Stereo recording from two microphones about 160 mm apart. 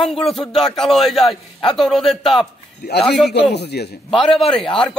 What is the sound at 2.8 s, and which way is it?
A man's voice, 90° left.